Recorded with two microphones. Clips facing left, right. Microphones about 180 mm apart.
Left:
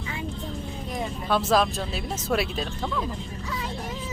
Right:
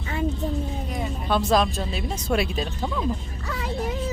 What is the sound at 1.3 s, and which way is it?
Speech, 5° left (ahead or behind).